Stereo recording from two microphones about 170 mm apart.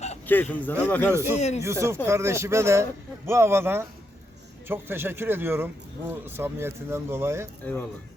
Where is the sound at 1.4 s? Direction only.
40° left (ahead or behind).